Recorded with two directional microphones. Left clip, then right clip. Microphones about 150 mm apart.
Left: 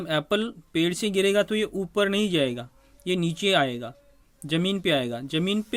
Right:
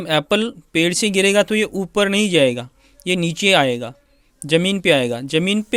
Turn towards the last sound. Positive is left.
turn(degrees=-35)  # may be behind; listen again after turning